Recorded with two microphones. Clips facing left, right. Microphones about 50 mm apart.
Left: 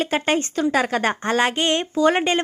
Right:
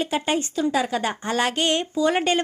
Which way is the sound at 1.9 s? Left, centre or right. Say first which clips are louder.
Left 6 dB; left.